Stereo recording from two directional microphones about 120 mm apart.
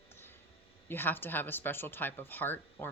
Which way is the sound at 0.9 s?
15° left (ahead or behind).